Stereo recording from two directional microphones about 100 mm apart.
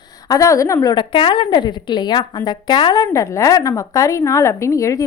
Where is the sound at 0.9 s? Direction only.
55° left (ahead or behind).